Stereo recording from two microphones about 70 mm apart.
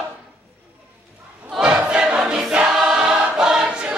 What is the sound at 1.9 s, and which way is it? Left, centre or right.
Choir, centre.